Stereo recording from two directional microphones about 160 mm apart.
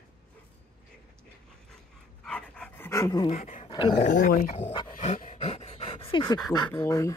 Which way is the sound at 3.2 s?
45° left (ahead or behind).